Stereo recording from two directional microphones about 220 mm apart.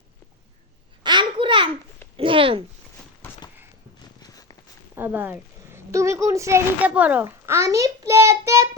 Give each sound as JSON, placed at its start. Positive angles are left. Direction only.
{"t": 1.0, "sound": "babbling", "side_deg": -20}
{"t": 2.1, "sound": "a sound", "side_deg": -25}
{"t": 4.2, "sound": "walk", "side_deg": 15}
{"t": 4.9, "sound": "a child's voice", "side_deg": -10}